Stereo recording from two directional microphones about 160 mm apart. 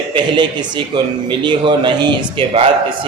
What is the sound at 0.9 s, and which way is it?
A man's voice, 30° right (ahead or behind).